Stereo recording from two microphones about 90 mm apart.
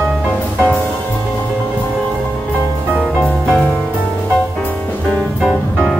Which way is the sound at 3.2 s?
20° left (ahead or behind).